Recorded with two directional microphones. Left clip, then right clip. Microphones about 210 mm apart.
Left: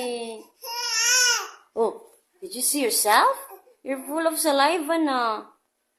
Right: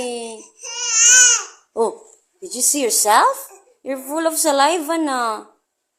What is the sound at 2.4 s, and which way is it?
Speech, 20° right (ahead or behind).